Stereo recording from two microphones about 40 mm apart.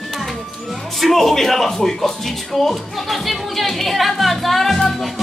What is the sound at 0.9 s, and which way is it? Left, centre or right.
Speech, centre.